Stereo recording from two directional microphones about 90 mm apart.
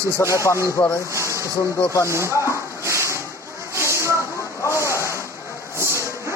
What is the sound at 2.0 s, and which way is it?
Speech, 30° right (ahead or behind).